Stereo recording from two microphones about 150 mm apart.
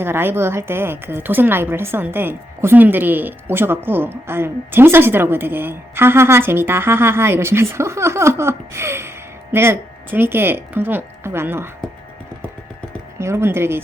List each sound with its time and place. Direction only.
0.0 s a woman's voice: 15° right (ahead or behind)
13.1 s a woman's voice: 15° right (ahead or behind)